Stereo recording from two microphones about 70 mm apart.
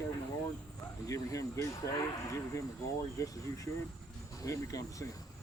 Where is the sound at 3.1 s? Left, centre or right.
Left.